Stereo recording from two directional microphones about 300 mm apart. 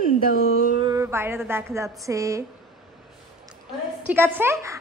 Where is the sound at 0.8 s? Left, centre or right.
Centre.